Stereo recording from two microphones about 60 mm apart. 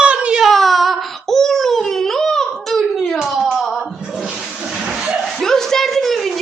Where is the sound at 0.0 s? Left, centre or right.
Centre.